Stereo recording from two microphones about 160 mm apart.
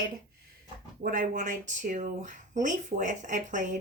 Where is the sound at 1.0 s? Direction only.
60° right (ahead or behind).